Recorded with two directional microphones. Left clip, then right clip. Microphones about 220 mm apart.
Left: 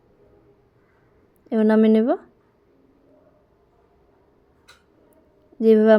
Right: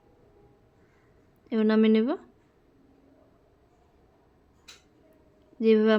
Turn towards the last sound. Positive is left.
turn(degrees=20)  # may be behind; listen again after turning